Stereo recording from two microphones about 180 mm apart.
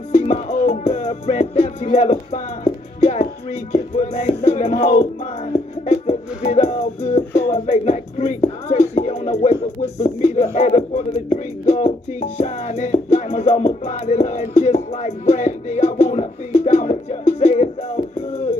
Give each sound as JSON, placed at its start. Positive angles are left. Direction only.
{"t": 0.1, "sound": "music", "side_deg": 40}